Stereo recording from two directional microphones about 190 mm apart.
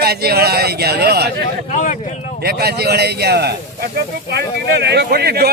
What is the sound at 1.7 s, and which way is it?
Speech, 40° left (ahead or behind).